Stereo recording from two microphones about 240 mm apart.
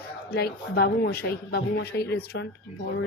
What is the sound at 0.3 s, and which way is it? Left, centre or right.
A man's voice, left.